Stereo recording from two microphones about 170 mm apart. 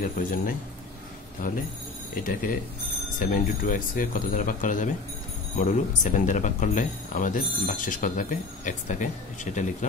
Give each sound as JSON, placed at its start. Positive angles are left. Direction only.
{"t": 0.2, "sound": "speech", "side_deg": 50}
{"t": 1.4, "sound": "speech", "side_deg": 55}